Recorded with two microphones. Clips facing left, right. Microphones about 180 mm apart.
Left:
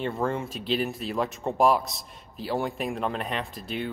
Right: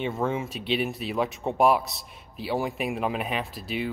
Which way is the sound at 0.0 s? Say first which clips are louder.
Even; centre (ahead or behind).